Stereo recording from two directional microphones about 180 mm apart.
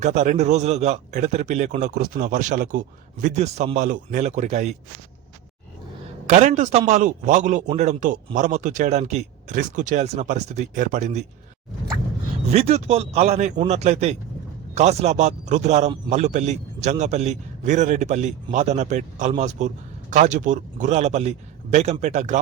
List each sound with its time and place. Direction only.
0.0 s a man's voice: 40° right (ahead or behind)
6.2 s a man's voice: 40° right (ahead or behind)
12.5 s a man's voice: 35° right (ahead or behind)